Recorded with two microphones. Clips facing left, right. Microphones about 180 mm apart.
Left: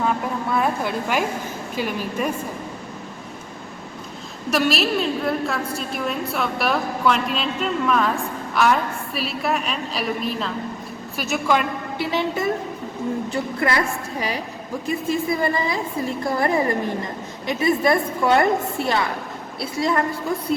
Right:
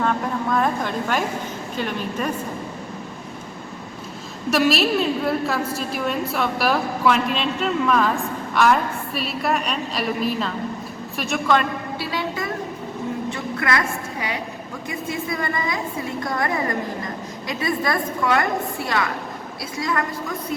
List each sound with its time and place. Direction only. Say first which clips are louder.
0.0 s a sound: right 1 dB; 5° left (ahead or behind)
1.7 s a woman's voice: left 1 dB; 5° left (ahead or behind)
4.5 s a woman's voice: right 2 dB; centre (ahead or behind)
13.3 s a woman's voice: left 2 dB; 30° left (ahead or behind)
15.3 s a woman's voice: left 1 dB; 30° left (ahead or behind)